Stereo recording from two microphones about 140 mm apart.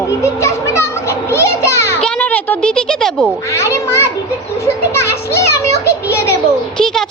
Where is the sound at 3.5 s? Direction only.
20° left (ahead or behind).